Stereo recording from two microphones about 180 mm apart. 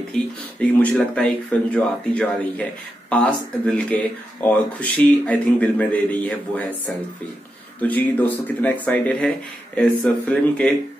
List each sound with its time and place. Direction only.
0.6 s speech: 5° left (ahead or behind)
7.8 s speech: 10° left (ahead or behind)